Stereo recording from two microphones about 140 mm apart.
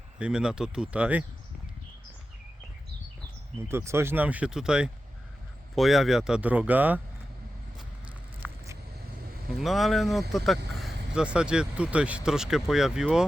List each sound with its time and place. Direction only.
0.2 s speech: 5° right (ahead or behind)
3.7 s speech: 20° right (ahead or behind)
8.4 s vehicle: 20° right (ahead or behind)
9.5 s speech: centre (ahead or behind)